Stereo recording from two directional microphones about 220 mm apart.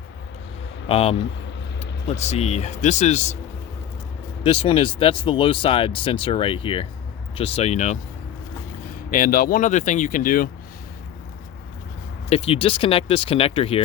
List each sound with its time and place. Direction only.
0.9 s speech: 25° left (ahead or behind)
4.4 s speech: 25° left (ahead or behind)
9.0 s speech: 40° left (ahead or behind)
12.3 s speech: 25° left (ahead or behind)